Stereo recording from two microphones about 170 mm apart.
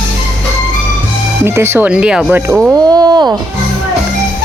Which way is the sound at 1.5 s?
15° right (ahead or behind).